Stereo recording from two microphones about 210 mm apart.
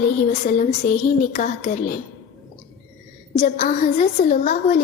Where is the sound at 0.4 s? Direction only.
35° left (ahead or behind).